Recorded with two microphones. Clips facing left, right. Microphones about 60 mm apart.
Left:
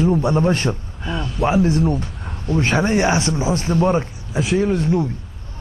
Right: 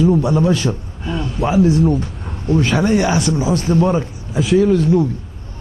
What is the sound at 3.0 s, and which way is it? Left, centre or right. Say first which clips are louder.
Speech: right 2 dB; left.